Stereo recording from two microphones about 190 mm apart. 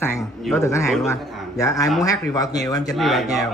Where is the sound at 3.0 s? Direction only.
Centre (ahead or behind).